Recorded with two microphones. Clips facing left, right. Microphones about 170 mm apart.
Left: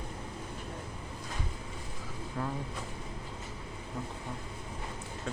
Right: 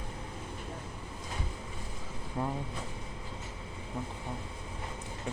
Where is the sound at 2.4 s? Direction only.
25° right (ahead or behind).